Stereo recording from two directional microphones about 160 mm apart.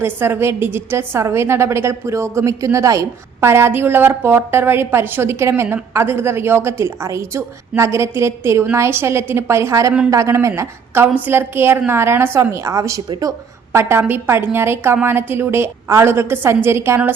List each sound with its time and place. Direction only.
0.0 s a woman's voice: 15° right (ahead or behind)